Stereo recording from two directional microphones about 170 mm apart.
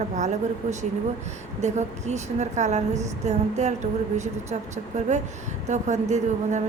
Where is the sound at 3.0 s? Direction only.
40° right (ahead or behind).